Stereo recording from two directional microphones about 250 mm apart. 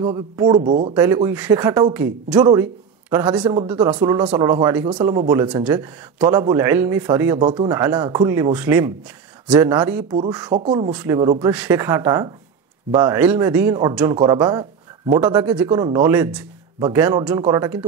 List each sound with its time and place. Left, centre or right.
0.0 s speech: centre
0.7 s speech: right
0.9 s a man's voice: centre
10.9 s speech: centre
11.1 s speech: centre